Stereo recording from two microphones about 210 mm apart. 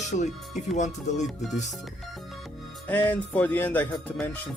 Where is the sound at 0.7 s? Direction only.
35° left (ahead or behind).